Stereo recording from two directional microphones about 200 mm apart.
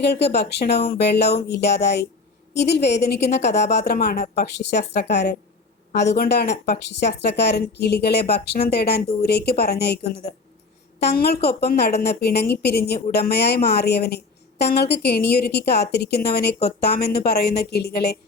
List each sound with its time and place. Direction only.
0.0 s a woman's voice: 55° left (ahead or behind)